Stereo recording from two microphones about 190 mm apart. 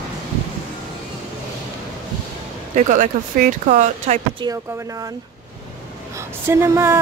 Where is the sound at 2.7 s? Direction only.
40° right (ahead or behind).